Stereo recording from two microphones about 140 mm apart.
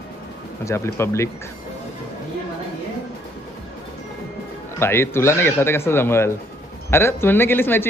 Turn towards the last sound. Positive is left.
turn(degrees=15)  # may be behind; listen again after turning